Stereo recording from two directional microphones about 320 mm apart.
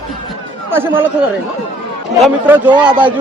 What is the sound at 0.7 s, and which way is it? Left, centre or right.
Speech, centre.